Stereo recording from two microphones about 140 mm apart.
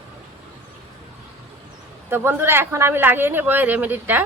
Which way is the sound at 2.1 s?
15° right (ahead or behind).